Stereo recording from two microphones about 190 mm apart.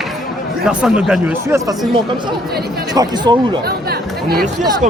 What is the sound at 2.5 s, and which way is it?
Speech, 55° right (ahead or behind).